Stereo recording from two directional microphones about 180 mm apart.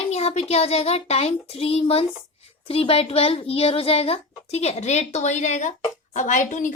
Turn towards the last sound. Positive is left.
turn(degrees=45)  # may be behind; listen again after turning